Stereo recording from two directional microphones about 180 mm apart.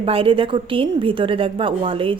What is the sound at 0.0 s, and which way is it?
A woman's voice, 30° right (ahead or behind).